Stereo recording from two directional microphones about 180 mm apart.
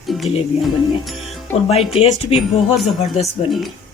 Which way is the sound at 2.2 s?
30° left (ahead or behind).